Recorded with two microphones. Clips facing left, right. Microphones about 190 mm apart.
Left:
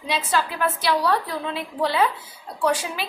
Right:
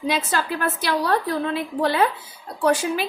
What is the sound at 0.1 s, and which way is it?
A woman's voice, 50° right (ahead or behind).